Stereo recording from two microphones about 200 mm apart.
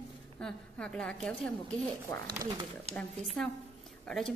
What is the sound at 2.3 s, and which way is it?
Speech, 15° right (ahead or behind).